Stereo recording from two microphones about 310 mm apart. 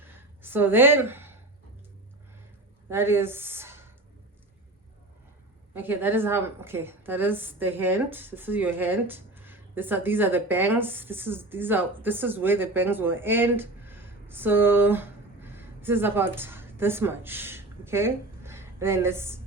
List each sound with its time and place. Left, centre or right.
0.0 s a sound: centre
2.9 s speech: centre
5.7 s a woman's voice: centre